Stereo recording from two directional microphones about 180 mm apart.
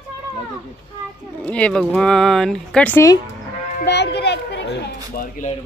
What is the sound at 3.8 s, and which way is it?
A child's voice, 70° left (ahead or behind).